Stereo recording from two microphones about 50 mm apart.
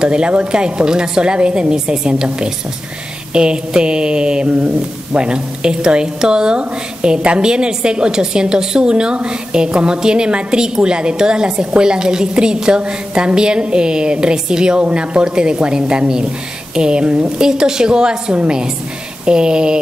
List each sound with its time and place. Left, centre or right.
0.0 s a woman's voice: centre